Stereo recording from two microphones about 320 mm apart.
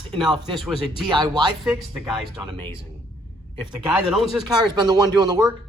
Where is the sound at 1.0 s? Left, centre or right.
Centre.